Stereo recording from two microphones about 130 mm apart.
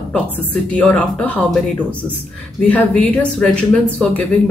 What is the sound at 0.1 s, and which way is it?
A woman's voice, 10° left (ahead or behind).